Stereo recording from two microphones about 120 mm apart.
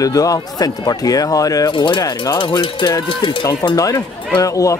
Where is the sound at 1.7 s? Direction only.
40° left (ahead or behind).